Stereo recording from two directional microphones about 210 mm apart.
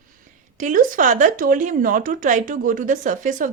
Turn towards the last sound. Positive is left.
turn(degrees=-40)  # may be behind; listen again after turning